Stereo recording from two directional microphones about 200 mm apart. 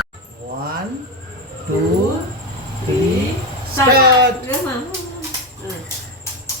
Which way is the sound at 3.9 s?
50° right (ahead or behind).